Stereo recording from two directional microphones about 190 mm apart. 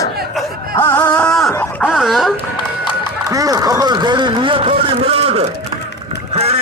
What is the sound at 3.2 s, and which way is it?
Speech, 20° right (ahead or behind).